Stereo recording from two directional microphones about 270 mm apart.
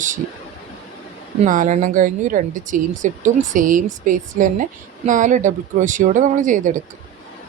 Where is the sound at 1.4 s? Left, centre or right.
Right.